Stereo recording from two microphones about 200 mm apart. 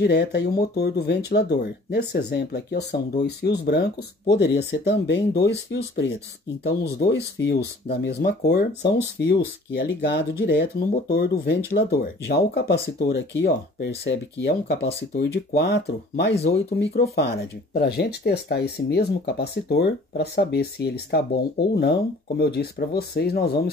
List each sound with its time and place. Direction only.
0.0 s speech: 55° left (ahead or behind)
16.3 s speech: 30° left (ahead or behind)
16.7 s speech: 50° left (ahead or behind)